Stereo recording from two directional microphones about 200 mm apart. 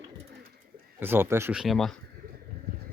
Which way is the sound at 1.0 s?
10° right (ahead or behind).